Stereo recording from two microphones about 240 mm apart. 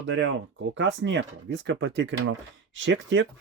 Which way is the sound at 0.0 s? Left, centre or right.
Right.